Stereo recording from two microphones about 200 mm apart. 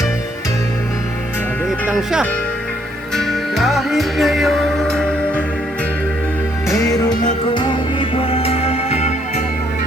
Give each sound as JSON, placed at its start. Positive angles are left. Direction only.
{"t": 1.9, "sound": "speech", "side_deg": 0}
{"t": 3.2, "sound": "music", "side_deg": 0}
{"t": 6.7, "sound": "music", "side_deg": 15}